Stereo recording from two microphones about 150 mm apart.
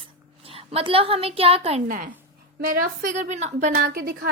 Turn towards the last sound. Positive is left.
turn(degrees=-80)